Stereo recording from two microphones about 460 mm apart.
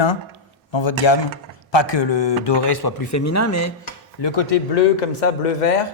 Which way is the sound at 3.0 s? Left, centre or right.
Left.